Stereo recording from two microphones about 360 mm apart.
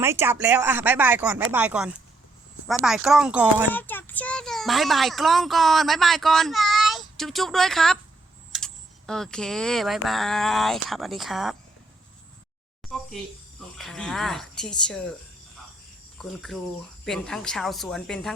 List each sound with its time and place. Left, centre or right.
0.0 s a child's voice: centre
12.8 s a sound: centre
13.7 s a child's voice: centre
16.1 s a child's voice: centre